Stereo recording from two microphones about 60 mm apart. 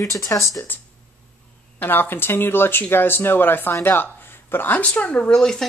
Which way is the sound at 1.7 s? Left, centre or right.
Left.